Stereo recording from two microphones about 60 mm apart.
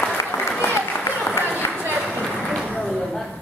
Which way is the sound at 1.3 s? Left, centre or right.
Right.